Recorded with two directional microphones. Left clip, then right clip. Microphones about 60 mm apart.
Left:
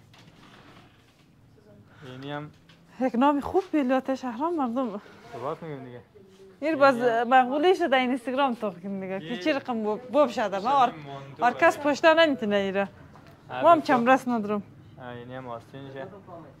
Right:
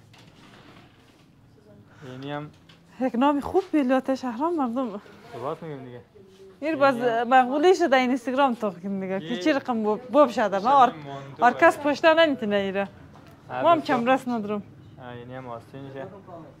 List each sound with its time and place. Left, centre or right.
2.2 s speech: centre
3.0 s speech: centre
3.7 s speech: centre
6.6 s speech: centre
7.5 s speech: centre
9.2 s a man's voice: right
11.9 s speech: centre
13.5 s a man's voice: right
13.9 s speech: left
15.0 s speech: centre
15.7 s speech: centre